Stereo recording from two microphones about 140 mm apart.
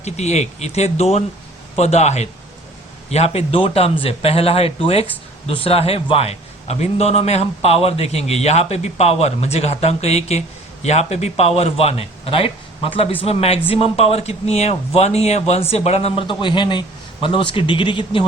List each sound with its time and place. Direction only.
0.0 s a man's voice: 50° left (ahead or behind); by 18.3 s 35° left (ahead or behind)